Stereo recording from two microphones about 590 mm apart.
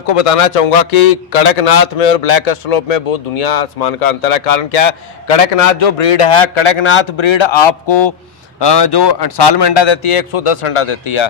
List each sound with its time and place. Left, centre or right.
0.0 s a man's voice: left
5.3 s a man's voice: left